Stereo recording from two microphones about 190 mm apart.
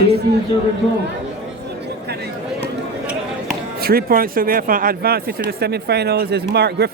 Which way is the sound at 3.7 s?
55° right (ahead or behind).